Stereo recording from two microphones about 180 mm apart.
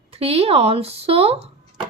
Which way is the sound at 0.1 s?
35° right (ahead or behind).